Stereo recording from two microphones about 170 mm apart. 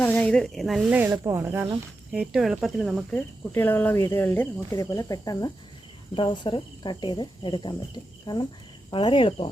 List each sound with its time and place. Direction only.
0.0 s speech: 10° left (ahead or behind); by 9.5 s 30° left (ahead or behind)